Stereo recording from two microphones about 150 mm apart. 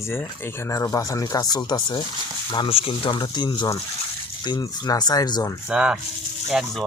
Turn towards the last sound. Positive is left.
turn(degrees=0)  # may be behind; listen again after turning